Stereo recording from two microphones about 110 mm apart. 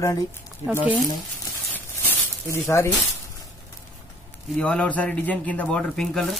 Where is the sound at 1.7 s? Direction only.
20° left (ahead or behind).